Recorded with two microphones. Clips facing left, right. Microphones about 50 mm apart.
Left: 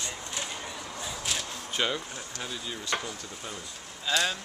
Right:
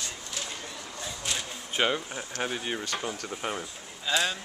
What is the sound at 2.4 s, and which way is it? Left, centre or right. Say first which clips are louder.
Speech: right 7 dB; right.